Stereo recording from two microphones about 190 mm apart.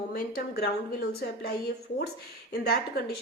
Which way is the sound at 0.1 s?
55° left (ahead or behind).